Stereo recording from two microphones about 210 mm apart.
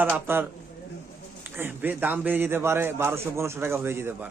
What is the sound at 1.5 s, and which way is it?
Speech, 10° right (ahead or behind).